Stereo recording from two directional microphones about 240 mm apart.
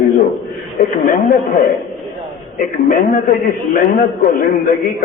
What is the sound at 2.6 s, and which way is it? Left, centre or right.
A man's voice, left.